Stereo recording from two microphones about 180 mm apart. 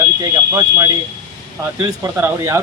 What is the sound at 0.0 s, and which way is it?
Speech, 20° right (ahead or behind).